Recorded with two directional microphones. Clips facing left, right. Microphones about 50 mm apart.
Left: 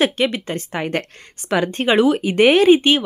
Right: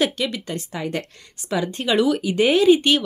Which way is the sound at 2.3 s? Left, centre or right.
Left.